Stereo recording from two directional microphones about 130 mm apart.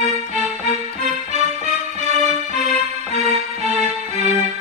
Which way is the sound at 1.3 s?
55° right (ahead or behind).